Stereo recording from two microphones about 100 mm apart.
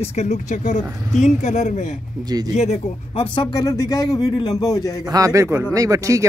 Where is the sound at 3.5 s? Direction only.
40° left (ahead or behind).